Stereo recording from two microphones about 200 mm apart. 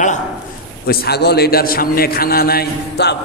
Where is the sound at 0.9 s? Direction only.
55° left (ahead or behind).